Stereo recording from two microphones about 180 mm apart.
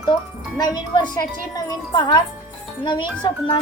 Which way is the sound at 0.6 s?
20° left (ahead or behind).